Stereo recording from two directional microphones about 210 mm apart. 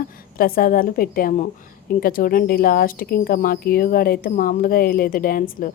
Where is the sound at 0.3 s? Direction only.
45° left (ahead or behind).